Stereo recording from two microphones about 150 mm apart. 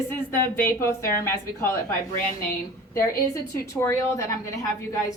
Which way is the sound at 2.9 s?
20° left (ahead or behind).